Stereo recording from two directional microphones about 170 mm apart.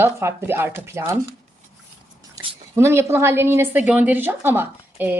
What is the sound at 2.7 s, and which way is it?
A woman's voice, 15° right (ahead or behind).